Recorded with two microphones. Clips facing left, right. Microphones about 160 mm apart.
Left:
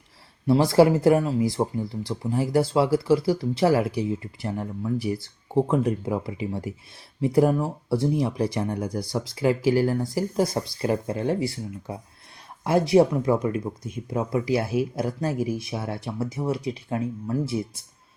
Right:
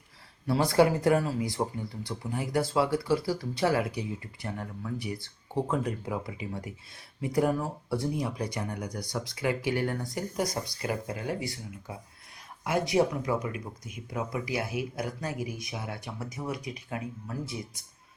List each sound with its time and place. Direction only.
0.4 s speech: 25° left (ahead or behind)